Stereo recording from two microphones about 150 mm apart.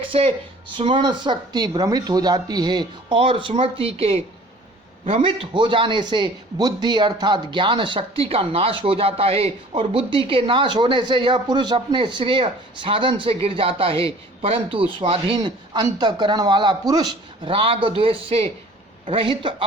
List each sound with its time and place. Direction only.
0.1 s a man's voice: 35° right (ahead or behind)